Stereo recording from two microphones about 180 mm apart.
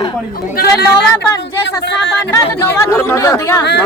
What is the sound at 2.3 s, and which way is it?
Speech, 15° left (ahead or behind).